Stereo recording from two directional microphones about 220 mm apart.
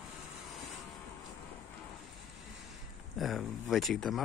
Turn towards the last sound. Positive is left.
turn(degrees=0)  # may be behind; listen again after turning